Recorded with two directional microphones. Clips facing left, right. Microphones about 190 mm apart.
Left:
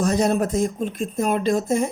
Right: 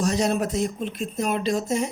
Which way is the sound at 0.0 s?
50° left (ahead or behind).